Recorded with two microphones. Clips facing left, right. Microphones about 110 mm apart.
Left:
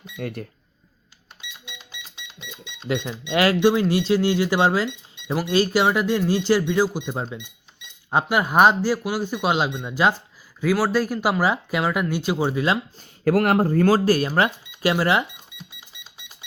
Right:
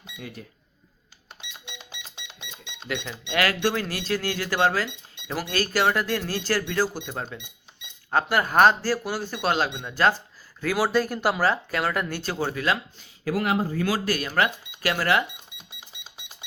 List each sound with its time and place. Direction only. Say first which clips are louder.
0.2 s speech: left 9 dB; 55° left (ahead or behind)
1.4 s cash register: left 2 dB; 25° right (ahead or behind)
3.2 s speech: left 6 dB; 25° left (ahead or behind)
13.0 s speech: left 7 dB; 55° left (ahead or behind)
14.0 s speech: left 5 dB; 30° left (ahead or behind)
15.5 s music: left 3 dB; 20° right (ahead or behind)